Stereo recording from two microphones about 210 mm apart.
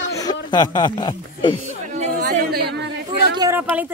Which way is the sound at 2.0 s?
45° right (ahead or behind).